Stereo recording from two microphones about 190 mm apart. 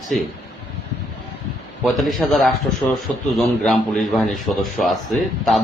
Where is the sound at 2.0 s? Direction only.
Centre (ahead or behind).